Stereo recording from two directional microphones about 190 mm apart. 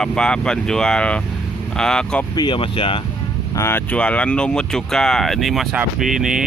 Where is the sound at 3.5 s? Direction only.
10° left (ahead or behind).